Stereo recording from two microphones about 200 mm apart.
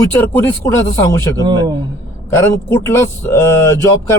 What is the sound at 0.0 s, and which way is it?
Speech, 10° left (ahead or behind).